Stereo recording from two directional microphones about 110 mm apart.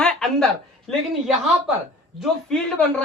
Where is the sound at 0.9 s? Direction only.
5° right (ahead or behind).